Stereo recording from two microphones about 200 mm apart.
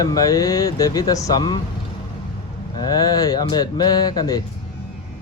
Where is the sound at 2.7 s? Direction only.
20° left (ahead or behind).